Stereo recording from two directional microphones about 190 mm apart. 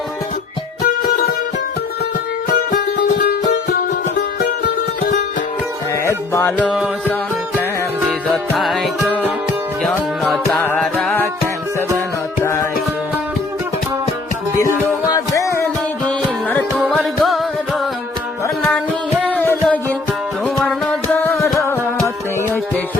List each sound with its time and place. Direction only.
2.7 s music: 50° left (ahead or behind)
6.1 s music: 15° left (ahead or behind)
8.5 s music: centre (ahead or behind)
10.6 s music: 10° left (ahead or behind)
12.4 s music: 15° left (ahead or behind)
15.1 s music: 15° left (ahead or behind); by 17.4 s centre (ahead or behind)
19.2 s music: 5° left (ahead or behind)